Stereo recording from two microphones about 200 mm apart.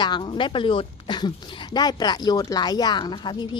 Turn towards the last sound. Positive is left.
turn(degrees=25)  # may be behind; listen again after turning